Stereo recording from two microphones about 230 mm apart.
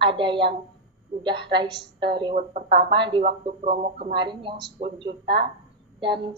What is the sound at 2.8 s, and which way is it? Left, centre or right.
Speech, right.